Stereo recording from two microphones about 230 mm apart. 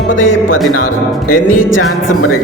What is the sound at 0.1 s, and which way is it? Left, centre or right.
Music, left.